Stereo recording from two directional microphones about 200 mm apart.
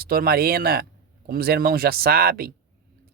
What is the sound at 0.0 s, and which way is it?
Speech, 50° right (ahead or behind).